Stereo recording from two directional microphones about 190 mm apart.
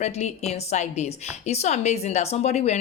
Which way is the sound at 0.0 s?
35° left (ahead or behind).